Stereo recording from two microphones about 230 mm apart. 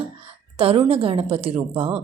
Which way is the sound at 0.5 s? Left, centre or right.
Right.